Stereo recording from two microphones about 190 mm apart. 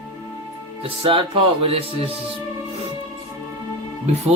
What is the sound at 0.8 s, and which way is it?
Speech, 30° right (ahead or behind).